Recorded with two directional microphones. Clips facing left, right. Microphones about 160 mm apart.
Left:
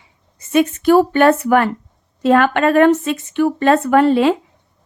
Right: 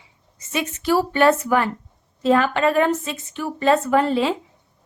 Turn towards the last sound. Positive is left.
turn(degrees=65)  # may be behind; listen again after turning